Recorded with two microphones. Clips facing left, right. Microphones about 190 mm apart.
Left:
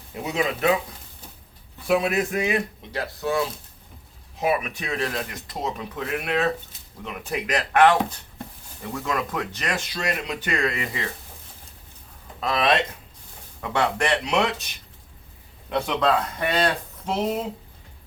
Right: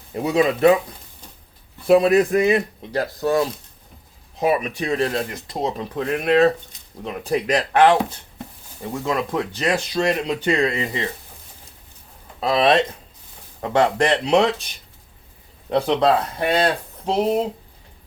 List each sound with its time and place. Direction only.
0.1 s speech: 40° right (ahead or behind)
1.9 s speech: 35° right (ahead or behind)
12.4 s speech: 35° right (ahead or behind)
15.7 s speech: 35° right (ahead or behind)